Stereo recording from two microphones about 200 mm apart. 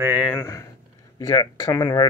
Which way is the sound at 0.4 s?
15° left (ahead or behind).